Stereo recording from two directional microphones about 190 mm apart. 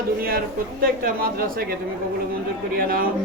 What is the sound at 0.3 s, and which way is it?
Speech, 50° right (ahead or behind).